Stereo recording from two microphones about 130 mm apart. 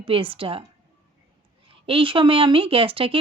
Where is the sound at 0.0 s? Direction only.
45° right (ahead or behind).